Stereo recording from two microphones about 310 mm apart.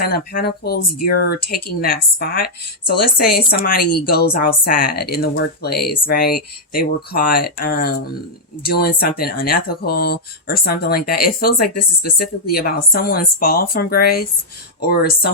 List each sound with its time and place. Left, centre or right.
0.0 s speech: left